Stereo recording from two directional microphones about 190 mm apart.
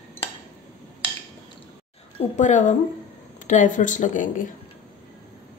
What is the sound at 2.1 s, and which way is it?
A woman's voice, 40° left (ahead or behind).